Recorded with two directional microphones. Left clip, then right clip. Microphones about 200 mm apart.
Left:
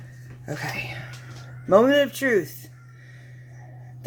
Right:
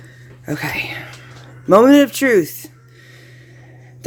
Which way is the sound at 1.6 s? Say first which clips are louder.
Right 7 dB; 60° right (ahead or behind).